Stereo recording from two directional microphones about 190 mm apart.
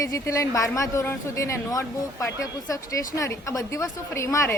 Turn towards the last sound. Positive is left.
turn(degrees=15)  # may be behind; listen again after turning